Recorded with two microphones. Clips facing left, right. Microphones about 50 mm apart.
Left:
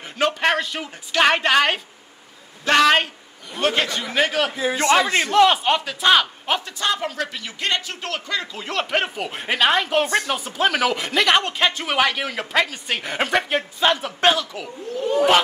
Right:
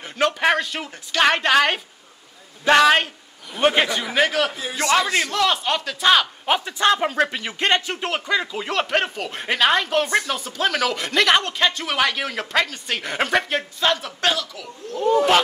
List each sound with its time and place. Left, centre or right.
0.0 s a sound: centre
0.4 s speech: centre
3.5 s speech: centre
4.6 s a man's voice: left
5.9 s speech: centre
6.4 s a man's voice: centre
6.8 s speech: right; by 13.7 s centre
13.7 s a man's voice: centre
15.0 s speech: centre